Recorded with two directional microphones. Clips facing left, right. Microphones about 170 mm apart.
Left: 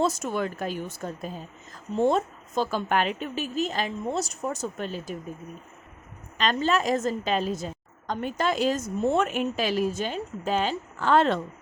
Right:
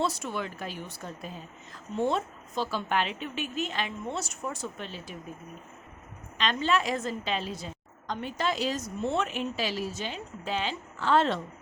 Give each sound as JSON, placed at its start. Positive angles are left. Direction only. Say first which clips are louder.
{"t": 0.0, "sound": "a woman's voice", "louder": "left 5 dB", "side_deg": 45}
{"t": 6.3, "sound": "a woman's voice", "louder": "left 3 dB", "side_deg": 45}